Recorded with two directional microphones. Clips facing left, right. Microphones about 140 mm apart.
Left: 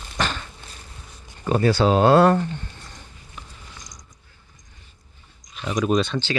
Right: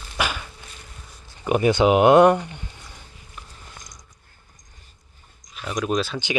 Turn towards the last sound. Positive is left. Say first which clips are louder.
# left 3 dB
turn(degrees=0)  # may be behind; listen again after turning